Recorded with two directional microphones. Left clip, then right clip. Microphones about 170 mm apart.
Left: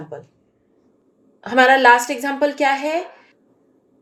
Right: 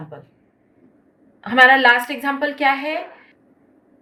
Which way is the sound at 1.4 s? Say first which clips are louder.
Even; 65° left (ahead or behind).